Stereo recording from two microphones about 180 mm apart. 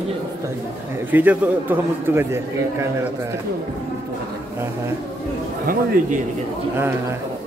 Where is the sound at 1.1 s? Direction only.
10° right (ahead or behind).